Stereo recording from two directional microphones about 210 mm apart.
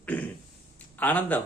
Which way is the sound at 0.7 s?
10° left (ahead or behind).